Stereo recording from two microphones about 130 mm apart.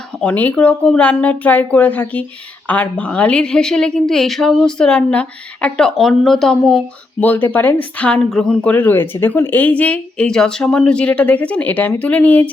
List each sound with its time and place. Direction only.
0.2 s a woman's voice: 10° left (ahead or behind)